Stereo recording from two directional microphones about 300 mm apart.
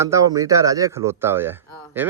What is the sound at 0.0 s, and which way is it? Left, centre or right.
Speech, centre.